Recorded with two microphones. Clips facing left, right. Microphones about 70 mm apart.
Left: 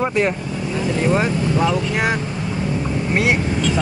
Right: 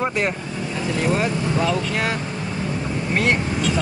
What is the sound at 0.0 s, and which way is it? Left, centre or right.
Speech, centre.